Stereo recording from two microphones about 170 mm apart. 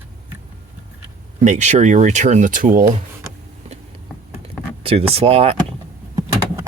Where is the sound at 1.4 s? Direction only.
45° right (ahead or behind).